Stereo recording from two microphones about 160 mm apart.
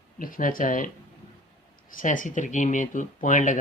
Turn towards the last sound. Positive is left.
turn(degrees=55)  # may be behind; listen again after turning